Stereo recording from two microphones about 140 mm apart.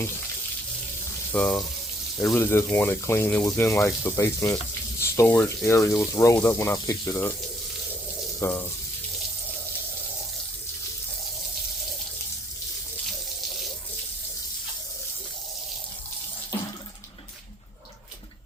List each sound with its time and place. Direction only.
1.3 s speech: 10° left (ahead or behind)
8.4 s speech: 15° left (ahead or behind)